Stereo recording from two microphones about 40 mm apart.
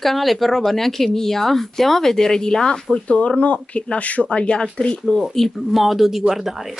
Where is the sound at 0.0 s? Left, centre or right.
Centre.